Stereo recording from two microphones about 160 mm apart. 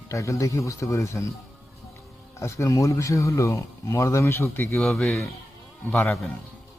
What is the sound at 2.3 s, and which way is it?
Speech, 20° left (ahead or behind).